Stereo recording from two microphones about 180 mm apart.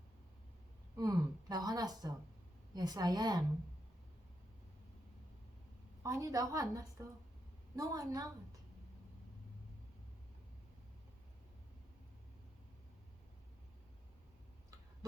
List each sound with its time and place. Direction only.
0.9 s speech: 20° right (ahead or behind)
6.0 s speech: 20° right (ahead or behind)